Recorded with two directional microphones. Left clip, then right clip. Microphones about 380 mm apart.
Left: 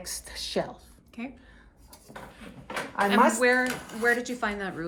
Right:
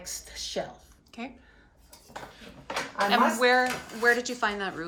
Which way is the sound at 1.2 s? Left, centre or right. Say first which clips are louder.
Even; centre.